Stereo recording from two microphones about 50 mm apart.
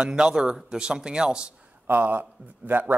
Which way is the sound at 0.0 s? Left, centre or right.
Centre.